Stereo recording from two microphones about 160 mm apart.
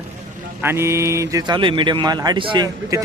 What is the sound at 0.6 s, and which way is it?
A man's voice, 15° right (ahead or behind).